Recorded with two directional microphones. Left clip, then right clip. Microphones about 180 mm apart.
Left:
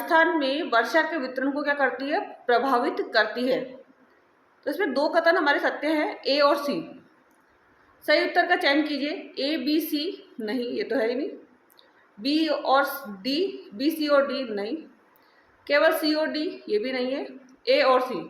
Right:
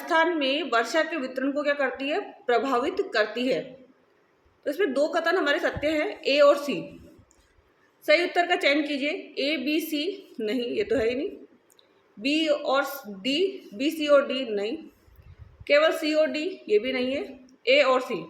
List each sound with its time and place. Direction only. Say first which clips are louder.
0.1 s a woman's voice: left 2 dB; 25° right (ahead or behind)
4.6 s a woman's voice: even; 25° right (ahead or behind)
8.0 s a woman's voice: even; 25° right (ahead or behind)
12.2 s a woman's voice: even; 25° right (ahead or behind)